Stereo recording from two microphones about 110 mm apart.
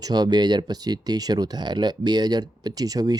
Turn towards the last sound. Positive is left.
turn(degrees=-35)  # may be behind; listen again after turning